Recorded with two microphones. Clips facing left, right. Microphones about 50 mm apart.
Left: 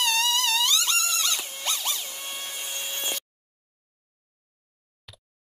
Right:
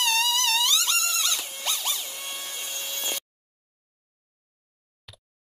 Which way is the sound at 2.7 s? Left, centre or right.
Left.